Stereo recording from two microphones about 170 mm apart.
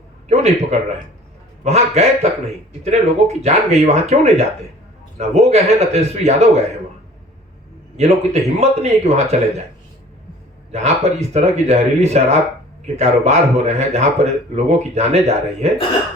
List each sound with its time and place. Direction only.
0.3 s a man's voice: 40° right (ahead or behind)
7.9 s a man's voice: 40° right (ahead or behind)
10.7 s a man's voice: 40° right (ahead or behind)